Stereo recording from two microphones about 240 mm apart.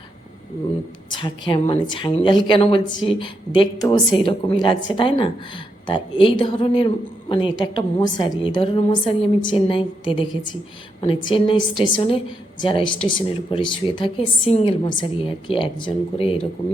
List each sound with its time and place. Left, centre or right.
1.1 s a woman's voice: centre